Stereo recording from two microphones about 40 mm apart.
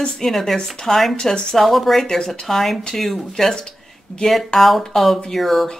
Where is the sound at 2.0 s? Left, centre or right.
Centre.